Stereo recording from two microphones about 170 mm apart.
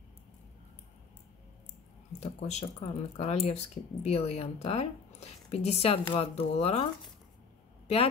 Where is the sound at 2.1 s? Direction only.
40° left (ahead or behind).